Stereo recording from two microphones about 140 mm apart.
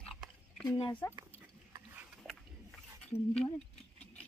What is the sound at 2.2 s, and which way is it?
Wild animals, centre (ahead or behind).